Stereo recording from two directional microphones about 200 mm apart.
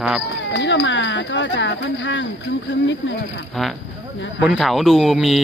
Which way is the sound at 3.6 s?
Centre (ahead or behind).